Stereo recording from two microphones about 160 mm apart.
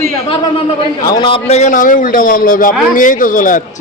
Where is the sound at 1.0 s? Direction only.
25° left (ahead or behind); by 3.6 s 55° left (ahead or behind).